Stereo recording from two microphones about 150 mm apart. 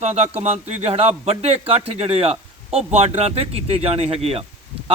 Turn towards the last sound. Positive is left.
turn(degrees=-40)  # may be behind; listen again after turning